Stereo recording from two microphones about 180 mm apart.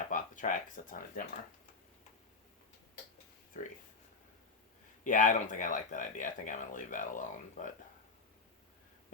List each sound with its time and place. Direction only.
0.1 s speech: 45° left (ahead or behind)
3.6 s speech: 45° left (ahead or behind)
5.0 s speech: 45° left (ahead or behind)